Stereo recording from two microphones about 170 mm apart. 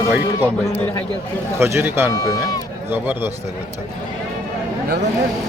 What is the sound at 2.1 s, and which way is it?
Speech, 20° left (ahead or behind).